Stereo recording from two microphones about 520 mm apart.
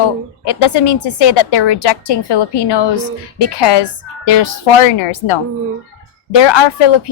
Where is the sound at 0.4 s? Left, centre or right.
Left.